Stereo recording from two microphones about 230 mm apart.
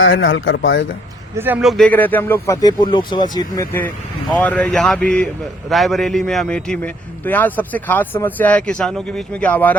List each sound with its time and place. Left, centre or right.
0.0 s speech: left
1.4 s a man's voice: centre